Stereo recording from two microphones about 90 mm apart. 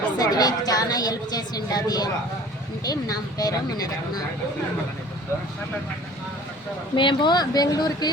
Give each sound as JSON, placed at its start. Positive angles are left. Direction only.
{"t": 0.2, "sound": "a woman's voice", "side_deg": 45}
{"t": 6.9, "sound": "speech", "side_deg": 65}